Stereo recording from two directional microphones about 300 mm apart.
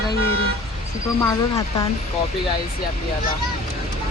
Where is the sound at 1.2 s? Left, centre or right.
Centre.